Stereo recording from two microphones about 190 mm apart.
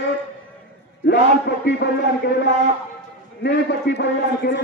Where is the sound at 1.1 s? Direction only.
65° left (ahead or behind).